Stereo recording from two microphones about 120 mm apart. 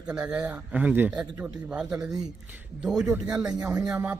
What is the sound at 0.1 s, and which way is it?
A man's voice, 10° right (ahead or behind).